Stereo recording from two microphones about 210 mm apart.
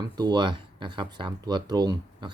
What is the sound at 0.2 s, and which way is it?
Speech, 20° right (ahead or behind).